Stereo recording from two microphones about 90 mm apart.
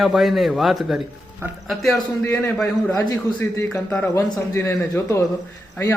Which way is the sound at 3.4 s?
30° left (ahead or behind).